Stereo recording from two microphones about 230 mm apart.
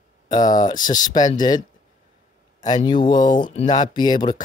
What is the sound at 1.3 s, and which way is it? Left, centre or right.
Speech, centre.